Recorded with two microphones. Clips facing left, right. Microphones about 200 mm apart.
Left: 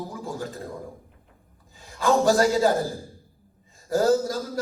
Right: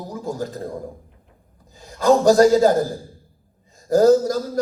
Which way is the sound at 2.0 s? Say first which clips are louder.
Right 6 dB; 40° right (ahead or behind).